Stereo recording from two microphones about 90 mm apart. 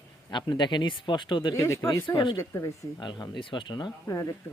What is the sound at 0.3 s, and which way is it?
A man's voice, 55° left (ahead or behind).